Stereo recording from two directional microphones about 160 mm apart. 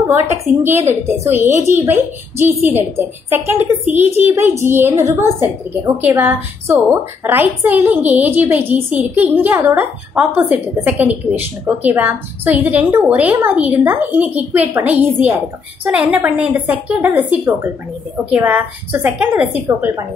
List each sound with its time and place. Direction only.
0.1 s a woman's voice: 15° right (ahead or behind)